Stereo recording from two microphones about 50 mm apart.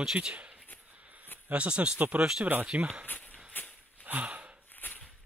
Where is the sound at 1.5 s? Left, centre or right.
Right.